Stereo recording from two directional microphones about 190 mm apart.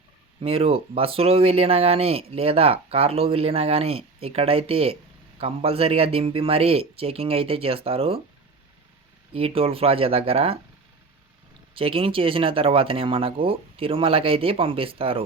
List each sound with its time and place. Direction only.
0.4 s speech: 30° right (ahead or behind)
9.3 s speech: 30° right (ahead or behind)
11.7 s speech: 30° right (ahead or behind)